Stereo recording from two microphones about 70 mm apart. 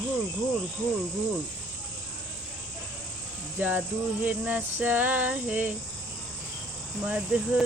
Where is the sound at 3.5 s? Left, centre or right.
Right.